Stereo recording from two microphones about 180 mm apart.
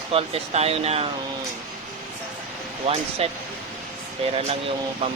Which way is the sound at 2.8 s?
35° right (ahead or behind).